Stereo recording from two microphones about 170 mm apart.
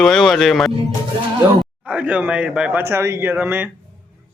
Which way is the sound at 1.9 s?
10° right (ahead or behind).